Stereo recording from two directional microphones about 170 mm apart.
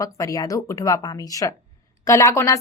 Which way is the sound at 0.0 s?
20° left (ahead or behind).